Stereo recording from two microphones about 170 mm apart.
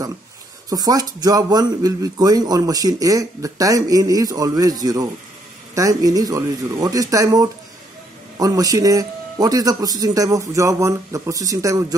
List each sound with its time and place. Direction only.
0.7 s speech: 20° right (ahead or behind)